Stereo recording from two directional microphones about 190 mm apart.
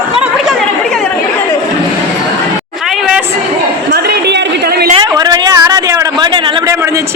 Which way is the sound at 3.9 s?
55° right (ahead or behind).